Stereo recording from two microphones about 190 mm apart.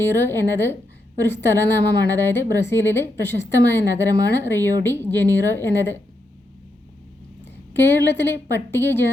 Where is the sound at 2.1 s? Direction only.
10° left (ahead or behind).